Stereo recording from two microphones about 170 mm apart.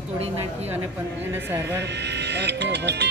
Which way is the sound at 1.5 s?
15° right (ahead or behind).